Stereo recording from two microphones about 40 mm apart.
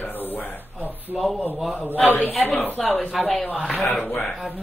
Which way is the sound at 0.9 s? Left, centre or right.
Right.